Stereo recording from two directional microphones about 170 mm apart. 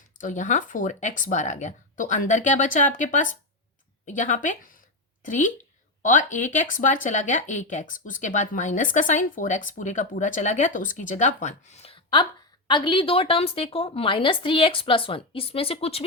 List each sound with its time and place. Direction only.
0.2 s speech: 50° left (ahead or behind)